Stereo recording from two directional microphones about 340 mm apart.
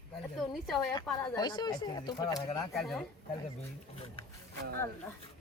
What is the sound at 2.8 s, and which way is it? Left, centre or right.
Speech, centre.